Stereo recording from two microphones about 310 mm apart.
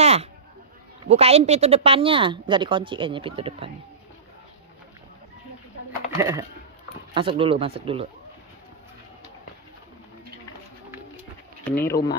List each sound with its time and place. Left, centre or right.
0.0 s a sound: centre
1.0 s speech: centre
6.1 s speech: centre
11.7 s speech: centre